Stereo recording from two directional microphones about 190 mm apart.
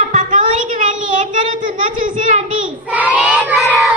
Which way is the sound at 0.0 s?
40° right (ahead or behind).